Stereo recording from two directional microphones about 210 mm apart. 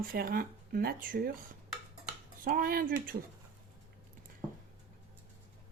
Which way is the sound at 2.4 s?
40° right (ahead or behind).